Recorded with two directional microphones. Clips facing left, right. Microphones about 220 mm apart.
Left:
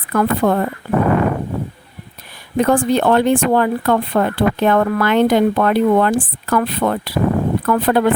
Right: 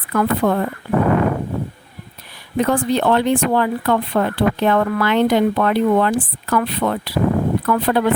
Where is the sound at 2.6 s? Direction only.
50° left (ahead or behind).